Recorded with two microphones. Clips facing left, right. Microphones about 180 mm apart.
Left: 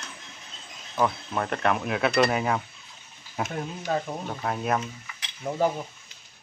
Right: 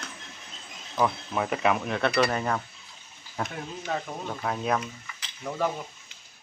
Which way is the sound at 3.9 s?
35° left (ahead or behind).